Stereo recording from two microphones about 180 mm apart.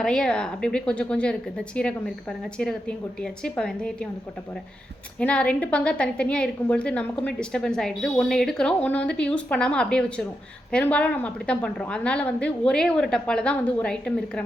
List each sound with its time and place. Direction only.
0.0 s a woman's voice: 5° left (ahead or behind)
5.2 s a woman's voice: 5° left (ahead or behind)